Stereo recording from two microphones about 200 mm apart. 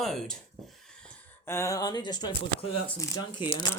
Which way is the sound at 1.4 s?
15° left (ahead or behind).